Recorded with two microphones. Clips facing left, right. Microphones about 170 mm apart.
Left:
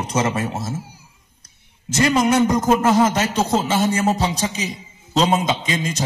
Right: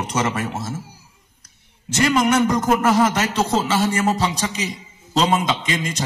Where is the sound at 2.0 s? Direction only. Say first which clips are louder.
Left 1 dB; 20° left (ahead or behind).